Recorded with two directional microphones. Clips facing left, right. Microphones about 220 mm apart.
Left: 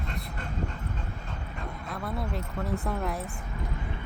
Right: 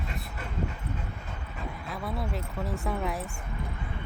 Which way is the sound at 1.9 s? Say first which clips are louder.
Left 1 dB; centre (ahead or behind).